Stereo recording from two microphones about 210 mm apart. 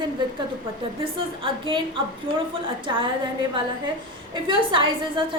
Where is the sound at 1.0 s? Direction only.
25° right (ahead or behind).